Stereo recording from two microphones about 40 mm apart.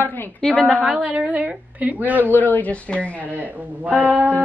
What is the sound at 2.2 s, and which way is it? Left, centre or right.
A woman's voice, left.